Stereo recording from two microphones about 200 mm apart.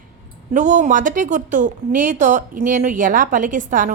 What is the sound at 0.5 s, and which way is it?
A woman's voice, 40° right (ahead or behind).